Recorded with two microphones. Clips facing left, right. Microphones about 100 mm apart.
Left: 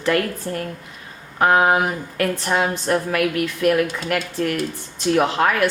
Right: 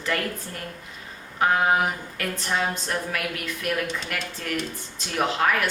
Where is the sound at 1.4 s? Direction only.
65° left (ahead or behind).